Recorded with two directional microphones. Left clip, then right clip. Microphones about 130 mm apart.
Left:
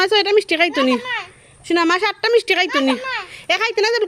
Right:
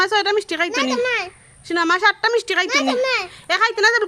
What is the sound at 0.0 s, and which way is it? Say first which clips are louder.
A woman's voice: left 3 dB; 5° left (ahead or behind).